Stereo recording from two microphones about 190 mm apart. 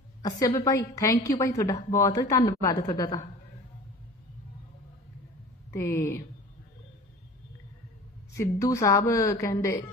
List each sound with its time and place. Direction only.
0.2 s a woman's voice: 20° left (ahead or behind)
5.7 s a woman's voice: 15° left (ahead or behind)
8.4 s a woman's voice: 15° left (ahead or behind)